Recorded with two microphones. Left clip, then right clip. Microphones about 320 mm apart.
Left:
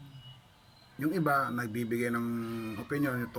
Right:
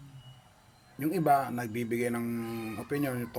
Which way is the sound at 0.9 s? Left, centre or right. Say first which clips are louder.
Right 3 dB; centre.